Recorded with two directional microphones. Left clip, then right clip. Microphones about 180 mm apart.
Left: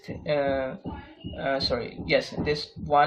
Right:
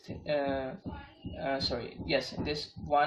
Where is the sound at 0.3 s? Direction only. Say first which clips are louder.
Left 6 dB; 40° left (ahead or behind).